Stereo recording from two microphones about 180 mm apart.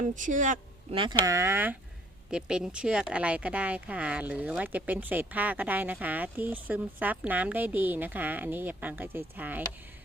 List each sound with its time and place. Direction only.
0.0 s speech: 45° right (ahead or behind)
0.9 s speech: 25° right (ahead or behind)